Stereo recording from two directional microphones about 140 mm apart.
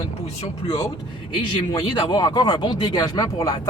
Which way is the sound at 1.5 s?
35° left (ahead or behind).